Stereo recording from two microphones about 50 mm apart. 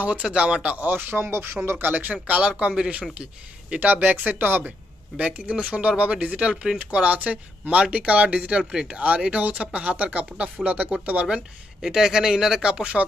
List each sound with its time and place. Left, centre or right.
0.2 s speech: centre
0.7 s speech: right
1.3 s speech: right
2.2 s speech: right
3.8 s speech: right
4.6 s a sound: right
5.3 s speech: right
11.2 s speech: centre